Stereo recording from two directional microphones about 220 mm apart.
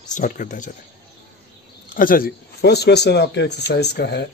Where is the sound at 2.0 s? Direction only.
40° left (ahead or behind).